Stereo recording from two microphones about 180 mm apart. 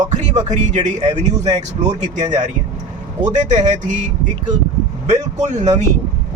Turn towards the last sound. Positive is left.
turn(degrees=-40)  # may be behind; listen again after turning